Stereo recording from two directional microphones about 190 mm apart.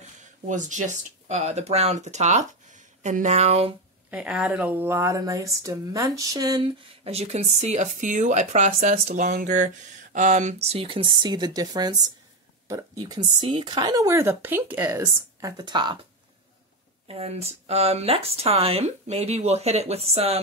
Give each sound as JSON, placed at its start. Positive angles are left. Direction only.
{"t": 0.5, "sound": "speech", "side_deg": -40}
{"t": 4.1, "sound": "speech", "side_deg": -5}
{"t": 17.1, "sound": "speech", "side_deg": -30}